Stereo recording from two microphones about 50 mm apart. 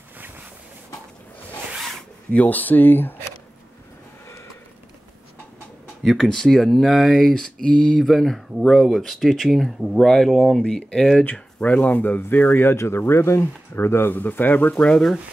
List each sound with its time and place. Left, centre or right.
2.3 s speech: left
6.0 s speech: centre
9.9 s speech: centre
11.3 s speech: left
12.2 s speech: left
12.7 s speech: left
14.1 s speech: left
14.7 s speech: left